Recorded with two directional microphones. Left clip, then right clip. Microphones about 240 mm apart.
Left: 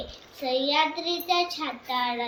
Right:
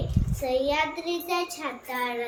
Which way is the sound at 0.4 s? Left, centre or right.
Centre.